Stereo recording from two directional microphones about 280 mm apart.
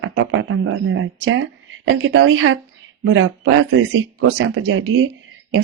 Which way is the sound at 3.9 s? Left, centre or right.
Right.